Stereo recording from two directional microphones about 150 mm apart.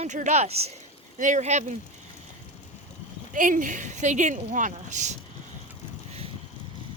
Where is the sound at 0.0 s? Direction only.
55° right (ahead or behind).